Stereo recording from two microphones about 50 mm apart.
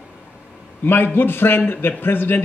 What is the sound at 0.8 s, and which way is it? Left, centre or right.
A man's voice, left.